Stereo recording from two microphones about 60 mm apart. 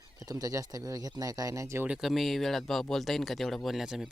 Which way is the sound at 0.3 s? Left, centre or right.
Right.